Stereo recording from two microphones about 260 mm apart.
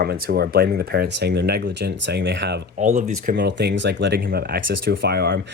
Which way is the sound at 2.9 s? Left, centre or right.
Right.